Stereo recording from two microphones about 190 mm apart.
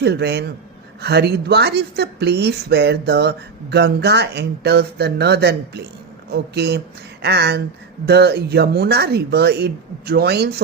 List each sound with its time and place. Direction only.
0.0 s speech: 60° right (ahead or behind)